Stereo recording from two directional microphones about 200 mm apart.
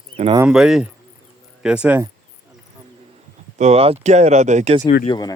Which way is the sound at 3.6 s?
35° right (ahead or behind).